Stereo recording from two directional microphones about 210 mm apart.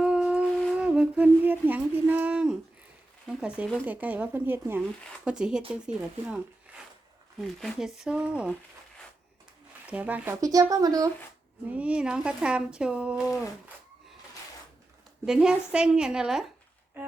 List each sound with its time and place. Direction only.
0.0 s speech: 5° right (ahead or behind)
9.8 s speech: 5° right (ahead or behind)
11.7 s speech: 5° right (ahead or behind)
15.3 s speech: 5° right (ahead or behind)